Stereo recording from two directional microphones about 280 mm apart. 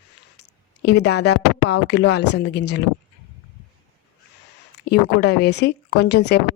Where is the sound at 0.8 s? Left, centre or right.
Left.